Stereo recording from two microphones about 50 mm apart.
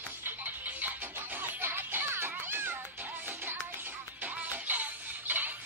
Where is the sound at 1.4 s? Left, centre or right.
Right.